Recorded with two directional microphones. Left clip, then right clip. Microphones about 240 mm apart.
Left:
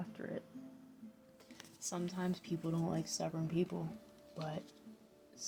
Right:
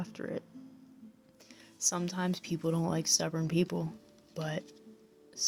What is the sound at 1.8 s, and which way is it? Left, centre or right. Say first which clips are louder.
Speech: right 8 dB; right.